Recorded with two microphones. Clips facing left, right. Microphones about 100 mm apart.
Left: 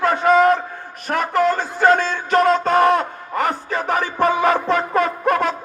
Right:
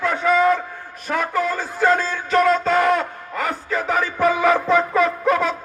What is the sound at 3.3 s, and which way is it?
Music, 60° left (ahead or behind).